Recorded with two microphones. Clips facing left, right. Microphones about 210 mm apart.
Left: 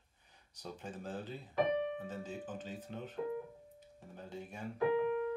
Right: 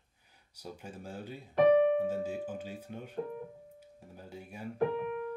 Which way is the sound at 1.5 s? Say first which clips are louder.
Right 10 dB; 65° right (ahead or behind).